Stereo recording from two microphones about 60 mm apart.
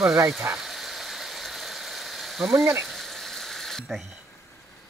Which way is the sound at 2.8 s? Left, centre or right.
Centre.